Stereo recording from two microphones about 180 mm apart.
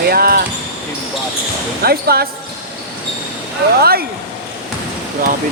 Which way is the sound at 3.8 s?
60° right (ahead or behind).